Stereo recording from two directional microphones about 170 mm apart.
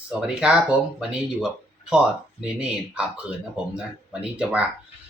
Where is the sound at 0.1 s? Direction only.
5° right (ahead or behind).